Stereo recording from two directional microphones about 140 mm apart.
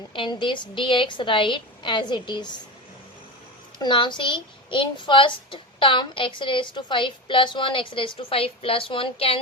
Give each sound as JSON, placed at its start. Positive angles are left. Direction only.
{"t": 0.1, "sound": "a child's voice", "side_deg": 35}
{"t": 3.8, "sound": "a child's voice", "side_deg": 35}